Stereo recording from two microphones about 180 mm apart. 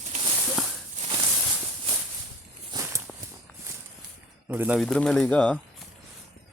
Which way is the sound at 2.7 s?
15° right (ahead or behind).